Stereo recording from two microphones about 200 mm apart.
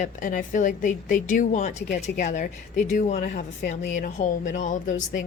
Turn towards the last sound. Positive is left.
turn(degrees=40)  # may be behind; listen again after turning